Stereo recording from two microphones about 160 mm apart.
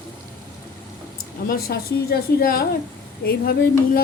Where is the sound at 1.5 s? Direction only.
75° left (ahead or behind).